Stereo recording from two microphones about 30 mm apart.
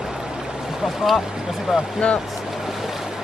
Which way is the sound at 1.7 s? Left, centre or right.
Centre.